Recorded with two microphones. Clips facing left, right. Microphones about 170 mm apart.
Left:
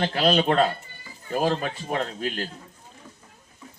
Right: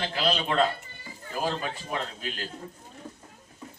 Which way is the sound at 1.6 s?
45° left (ahead or behind).